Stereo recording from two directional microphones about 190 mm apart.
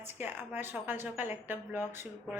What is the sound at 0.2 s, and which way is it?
A woman's voice, 10° right (ahead or behind).